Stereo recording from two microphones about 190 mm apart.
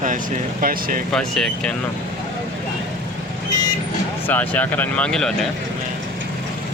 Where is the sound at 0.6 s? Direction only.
50° right (ahead or behind).